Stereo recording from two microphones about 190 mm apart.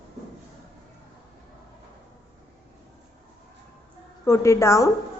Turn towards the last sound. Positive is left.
turn(degrees=15)  # may be behind; listen again after turning